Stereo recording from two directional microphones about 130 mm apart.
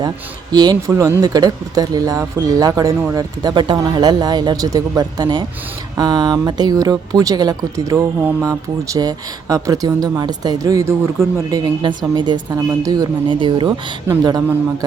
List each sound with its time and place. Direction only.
0.5 s speech: 30° right (ahead or behind)
11.6 s speech: 35° right (ahead or behind)